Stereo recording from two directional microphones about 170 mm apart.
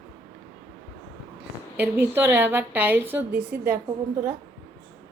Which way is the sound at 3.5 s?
65° right (ahead or behind).